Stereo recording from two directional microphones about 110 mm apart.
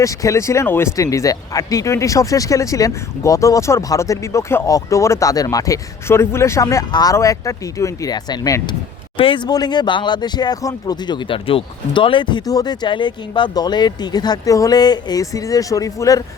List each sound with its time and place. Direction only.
0.0 s speech: 30° left (ahead or behind)
8.1 s speech: 40° left (ahead or behind)
9.1 s speech: 50° left (ahead or behind); by 16.2 s 30° left (ahead or behind)